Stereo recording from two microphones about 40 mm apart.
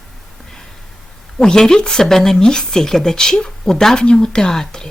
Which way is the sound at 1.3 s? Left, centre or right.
Centre.